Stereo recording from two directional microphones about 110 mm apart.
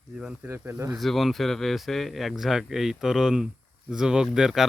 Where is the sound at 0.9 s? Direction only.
Centre (ahead or behind).